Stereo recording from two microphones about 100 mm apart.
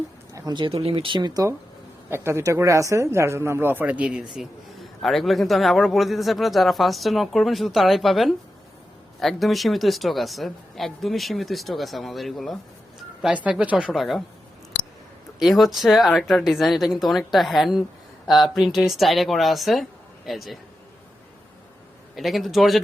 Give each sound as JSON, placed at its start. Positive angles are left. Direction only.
{"t": 0.7, "sound": "speech", "side_deg": -70}
{"t": 2.0, "sound": "speech", "side_deg": -25}
{"t": 13.2, "sound": "speech", "side_deg": -10}
{"t": 13.9, "sound": "speech", "side_deg": 0}
{"t": 15.4, "sound": "speech", "side_deg": 0}
{"t": 22.1, "sound": "speech", "side_deg": 0}